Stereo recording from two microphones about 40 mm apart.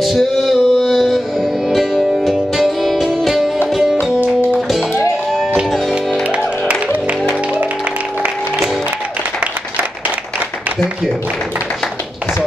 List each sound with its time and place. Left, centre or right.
0.0 s music: centre
5.3 s music: centre
7.1 s music: right